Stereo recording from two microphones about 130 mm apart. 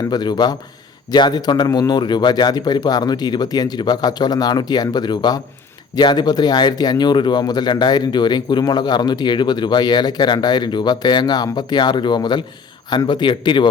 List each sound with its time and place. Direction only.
0.0 s speech: 30° left (ahead or behind)